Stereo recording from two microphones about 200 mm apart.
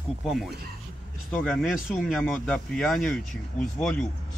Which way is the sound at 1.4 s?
Centre (ahead or behind).